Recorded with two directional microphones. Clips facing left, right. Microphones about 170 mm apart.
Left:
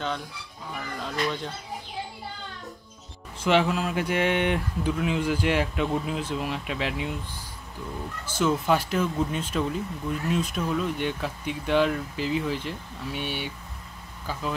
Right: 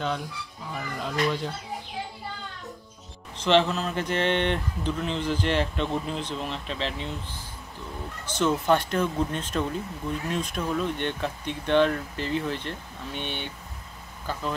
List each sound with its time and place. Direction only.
0.7 s speech: 5° right (ahead or behind)
3.3 s speech: 10° left (ahead or behind)
8.3 s speech: 5° left (ahead or behind)